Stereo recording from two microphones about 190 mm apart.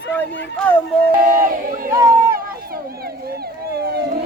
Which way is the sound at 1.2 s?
50° right (ahead or behind).